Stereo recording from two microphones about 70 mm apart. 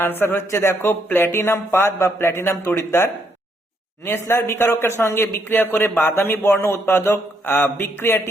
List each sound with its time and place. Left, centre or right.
0.0 s a man's voice: left